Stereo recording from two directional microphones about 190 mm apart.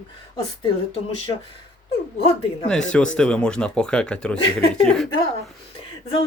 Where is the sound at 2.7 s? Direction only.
5° left (ahead or behind).